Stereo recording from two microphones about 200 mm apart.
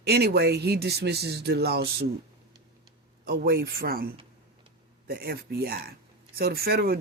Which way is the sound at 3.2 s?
50° right (ahead or behind).